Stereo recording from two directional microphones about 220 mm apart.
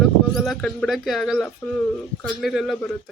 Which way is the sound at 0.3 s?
Centre (ahead or behind).